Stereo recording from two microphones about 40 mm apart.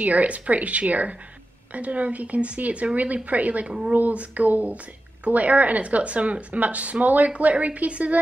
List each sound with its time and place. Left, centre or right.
0.0 s speech: right